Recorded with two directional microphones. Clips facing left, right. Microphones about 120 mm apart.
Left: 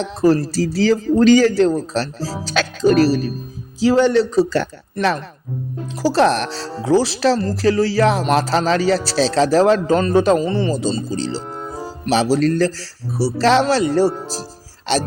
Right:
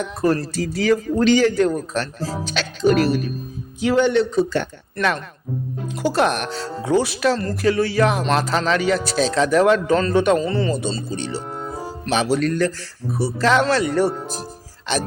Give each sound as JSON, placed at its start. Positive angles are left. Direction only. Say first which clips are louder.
{"t": 0.0, "sound": "speech", "louder": "left 4 dB", "side_deg": 30}
{"t": 11.4, "sound": "music", "louder": "left 1 dB", "side_deg": 0}
{"t": 12.1, "sound": "speech", "louder": "left 4 dB", "side_deg": 35}